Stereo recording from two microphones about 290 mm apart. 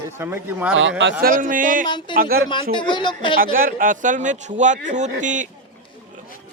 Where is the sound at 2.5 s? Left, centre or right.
Centre.